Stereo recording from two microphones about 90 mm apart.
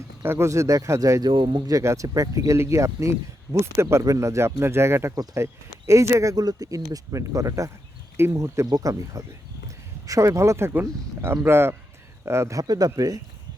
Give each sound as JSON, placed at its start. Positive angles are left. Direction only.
{"t": 0.2, "sound": "speech", "side_deg": -30}
{"t": 1.3, "sound": "speech", "side_deg": -65}
{"t": 1.6, "sound": "speech", "side_deg": -35}